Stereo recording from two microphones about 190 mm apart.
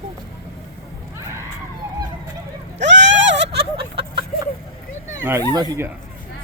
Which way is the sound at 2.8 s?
70° right (ahead or behind).